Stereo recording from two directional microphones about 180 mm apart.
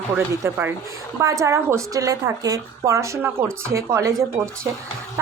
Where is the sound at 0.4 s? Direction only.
10° right (ahead or behind).